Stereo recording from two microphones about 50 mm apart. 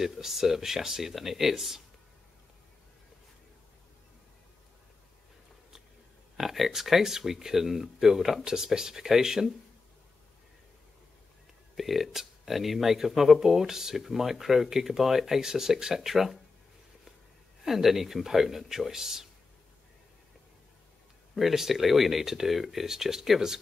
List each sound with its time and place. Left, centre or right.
0.0 s speech: centre
6.3 s speech: centre
11.7 s speech: centre
17.6 s speech: centre
21.4 s speech: centre